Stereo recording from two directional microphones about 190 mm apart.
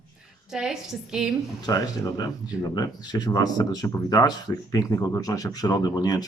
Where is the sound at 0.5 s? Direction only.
5° right (ahead or behind).